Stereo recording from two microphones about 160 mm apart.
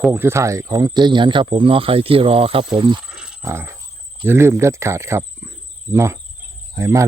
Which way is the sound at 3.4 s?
15° right (ahead or behind).